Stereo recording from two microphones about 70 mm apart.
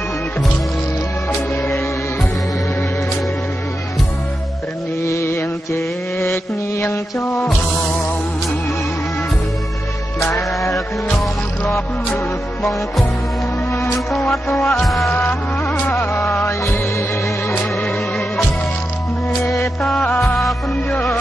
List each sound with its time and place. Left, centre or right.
1.5 s music: left
5.0 s mantra: left
10.3 s music: left
13.7 s music: left
14.3 s music: centre
15.7 s music: left
19.4 s music: left
20.3 s music: centre